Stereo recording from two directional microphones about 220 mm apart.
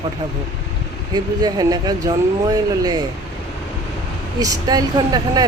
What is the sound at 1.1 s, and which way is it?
Speech, 20° right (ahead or behind).